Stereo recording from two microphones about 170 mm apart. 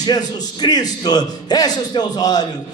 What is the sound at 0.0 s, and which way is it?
A man's voice, 25° left (ahead or behind).